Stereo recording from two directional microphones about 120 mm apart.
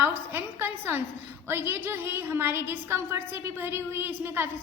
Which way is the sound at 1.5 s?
20° right (ahead or behind).